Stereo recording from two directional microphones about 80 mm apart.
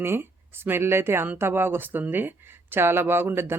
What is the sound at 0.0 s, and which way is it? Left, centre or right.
Speech, right.